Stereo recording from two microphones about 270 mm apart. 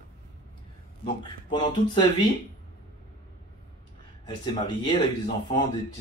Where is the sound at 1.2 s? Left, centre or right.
Centre.